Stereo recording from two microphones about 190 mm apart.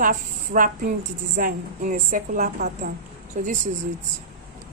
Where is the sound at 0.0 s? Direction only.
45° right (ahead or behind).